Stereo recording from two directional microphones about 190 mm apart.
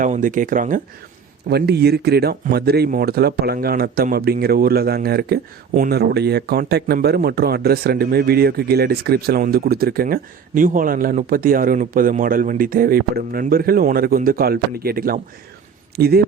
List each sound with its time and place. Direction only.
0.0 s speech: 45° right (ahead or behind)
1.5 s speech: 60° right (ahead or behind)